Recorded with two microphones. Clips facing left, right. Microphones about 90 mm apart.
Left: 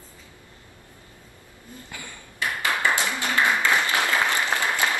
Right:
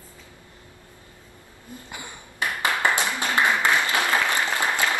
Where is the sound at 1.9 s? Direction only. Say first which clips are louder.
Right 1 dB; 20° right (ahead or behind).